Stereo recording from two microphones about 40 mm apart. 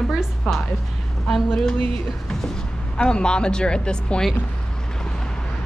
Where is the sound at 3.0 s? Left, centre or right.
Left.